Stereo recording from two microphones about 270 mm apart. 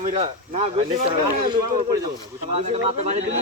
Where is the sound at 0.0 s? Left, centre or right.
Right.